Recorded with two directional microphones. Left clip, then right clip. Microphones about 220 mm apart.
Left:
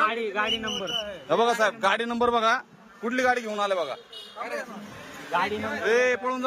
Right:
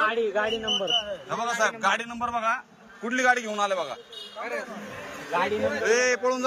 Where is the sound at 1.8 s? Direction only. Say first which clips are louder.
Left 2 dB; 25° left (ahead or behind).